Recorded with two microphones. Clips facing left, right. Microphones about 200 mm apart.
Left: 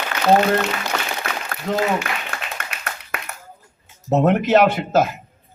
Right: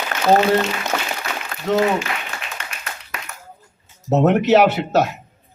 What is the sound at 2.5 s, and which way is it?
Clapping, 55° left (ahead or behind).